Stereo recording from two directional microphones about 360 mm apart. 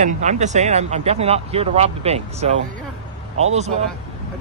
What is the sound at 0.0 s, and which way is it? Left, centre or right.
Speech, centre.